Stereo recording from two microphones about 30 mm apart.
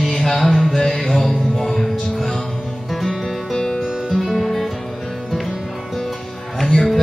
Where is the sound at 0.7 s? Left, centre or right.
Centre.